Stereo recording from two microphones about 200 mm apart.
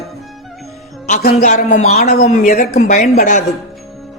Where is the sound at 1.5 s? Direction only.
35° left (ahead or behind).